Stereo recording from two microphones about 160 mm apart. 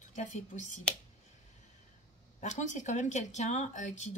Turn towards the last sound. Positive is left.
turn(degrees=50)  # may be behind; listen again after turning